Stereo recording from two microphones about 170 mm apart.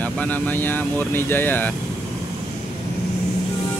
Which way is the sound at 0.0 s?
10° left (ahead or behind).